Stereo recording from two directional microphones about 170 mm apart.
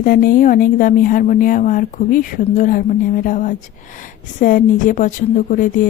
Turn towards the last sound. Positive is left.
turn(degrees=50)  # may be behind; listen again after turning